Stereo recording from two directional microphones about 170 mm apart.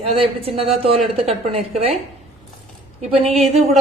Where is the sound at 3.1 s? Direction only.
35° right (ahead or behind).